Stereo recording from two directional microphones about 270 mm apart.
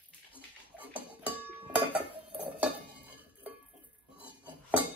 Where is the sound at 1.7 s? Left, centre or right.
Centre.